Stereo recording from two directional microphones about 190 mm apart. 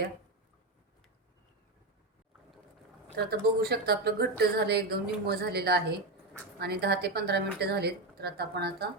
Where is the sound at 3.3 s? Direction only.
55° right (ahead or behind).